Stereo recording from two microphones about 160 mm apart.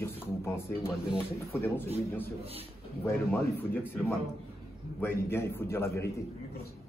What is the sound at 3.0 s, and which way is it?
Speech, 10° left (ahead or behind).